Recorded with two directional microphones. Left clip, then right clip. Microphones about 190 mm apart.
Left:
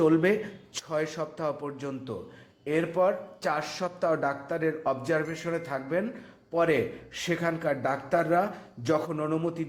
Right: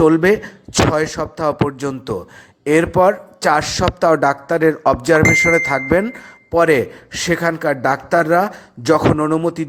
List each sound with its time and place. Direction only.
0.0 s a man's voice: 35° right (ahead or behind)